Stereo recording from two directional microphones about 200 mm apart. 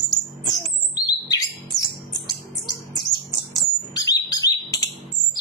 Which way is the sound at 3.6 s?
20° left (ahead or behind).